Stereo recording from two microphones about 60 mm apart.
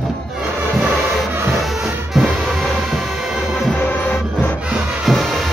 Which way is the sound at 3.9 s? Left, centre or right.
Left.